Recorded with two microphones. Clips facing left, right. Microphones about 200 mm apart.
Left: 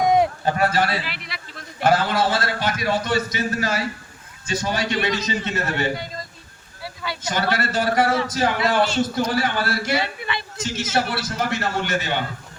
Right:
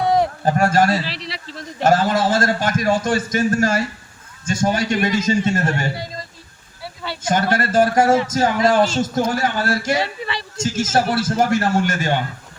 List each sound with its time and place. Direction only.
0.0 s a sound: 10° left (ahead or behind)
0.4 s a man's voice: 45° right (ahead or behind)
7.2 s a man's voice: 50° right (ahead or behind)
10.0 s a woman's voice: 30° right (ahead or behind)
10.6 s a man's voice: 45° right (ahead or behind)